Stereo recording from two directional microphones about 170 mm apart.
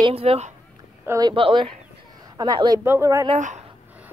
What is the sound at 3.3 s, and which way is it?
Speech, 45° right (ahead or behind).